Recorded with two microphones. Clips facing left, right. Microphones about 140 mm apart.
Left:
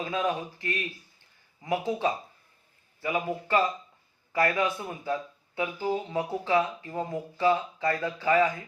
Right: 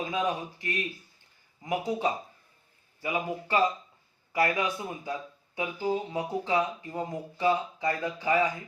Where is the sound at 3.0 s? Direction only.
15° right (ahead or behind).